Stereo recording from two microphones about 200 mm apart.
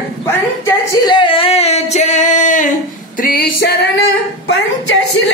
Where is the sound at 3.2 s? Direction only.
50° left (ahead or behind).